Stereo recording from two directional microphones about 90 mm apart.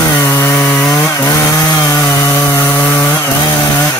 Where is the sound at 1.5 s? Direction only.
30° left (ahead or behind).